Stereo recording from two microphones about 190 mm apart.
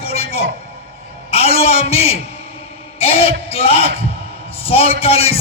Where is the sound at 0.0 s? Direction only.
30° left (ahead or behind).